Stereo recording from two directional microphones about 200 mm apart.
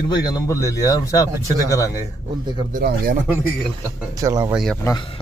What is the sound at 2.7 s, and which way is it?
Speech, 45° right (ahead or behind).